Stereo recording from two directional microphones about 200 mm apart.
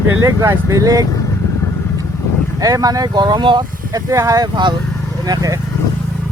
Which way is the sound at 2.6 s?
15° right (ahead or behind).